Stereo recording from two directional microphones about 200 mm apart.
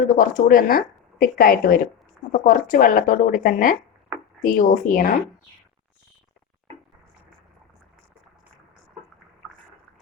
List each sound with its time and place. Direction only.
0.0 s a woman's voice: 40° left (ahead or behind)